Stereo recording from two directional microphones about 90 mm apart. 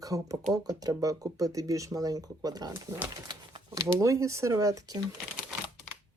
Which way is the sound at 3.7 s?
35° right (ahead or behind).